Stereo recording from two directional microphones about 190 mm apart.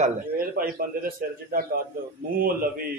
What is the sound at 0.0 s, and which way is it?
Speech, 50° right (ahead or behind).